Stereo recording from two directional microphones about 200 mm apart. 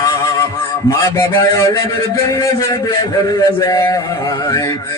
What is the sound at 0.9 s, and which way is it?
A man's voice, 15° left (ahead or behind).